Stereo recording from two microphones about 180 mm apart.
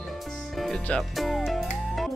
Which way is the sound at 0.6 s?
5° left (ahead or behind).